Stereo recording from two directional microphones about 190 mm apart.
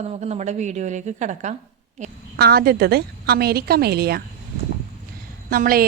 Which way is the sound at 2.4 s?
55° right (ahead or behind).